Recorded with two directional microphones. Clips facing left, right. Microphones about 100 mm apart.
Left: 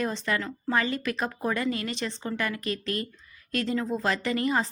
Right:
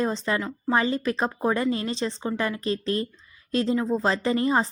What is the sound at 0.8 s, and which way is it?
Speech, 30° right (ahead or behind).